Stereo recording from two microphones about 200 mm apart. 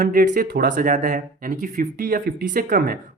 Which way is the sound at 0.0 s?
45° right (ahead or behind).